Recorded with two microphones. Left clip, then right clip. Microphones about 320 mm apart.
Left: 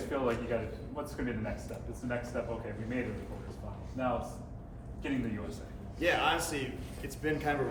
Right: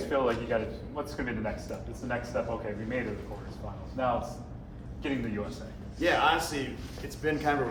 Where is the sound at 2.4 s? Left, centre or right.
Centre.